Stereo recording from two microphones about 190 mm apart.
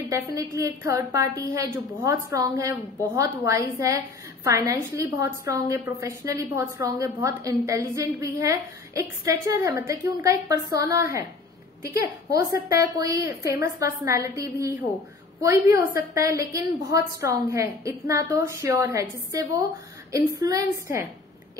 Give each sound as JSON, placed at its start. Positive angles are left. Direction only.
{"t": 0.1, "sound": "a woman's voice", "side_deg": -15}